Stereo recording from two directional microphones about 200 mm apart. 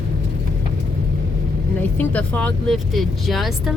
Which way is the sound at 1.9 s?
5° left (ahead or behind).